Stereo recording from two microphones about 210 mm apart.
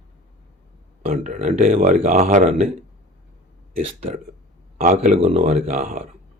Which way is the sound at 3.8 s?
30° right (ahead or behind).